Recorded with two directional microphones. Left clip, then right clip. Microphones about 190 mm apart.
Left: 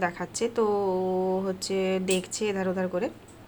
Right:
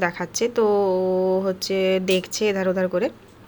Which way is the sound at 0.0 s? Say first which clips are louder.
Right 5 dB; 15° right (ahead or behind).